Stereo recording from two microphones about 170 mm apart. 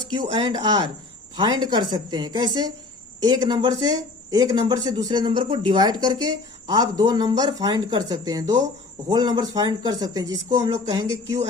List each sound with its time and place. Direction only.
0.1 s speech: 25° right (ahead or behind)